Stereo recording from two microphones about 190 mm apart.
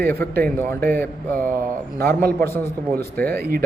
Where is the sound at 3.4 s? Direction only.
50° right (ahead or behind).